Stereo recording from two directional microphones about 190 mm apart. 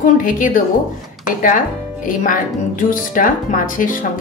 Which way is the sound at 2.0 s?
45° left (ahead or behind).